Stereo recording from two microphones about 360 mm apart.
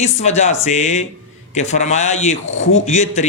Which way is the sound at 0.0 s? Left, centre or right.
Centre.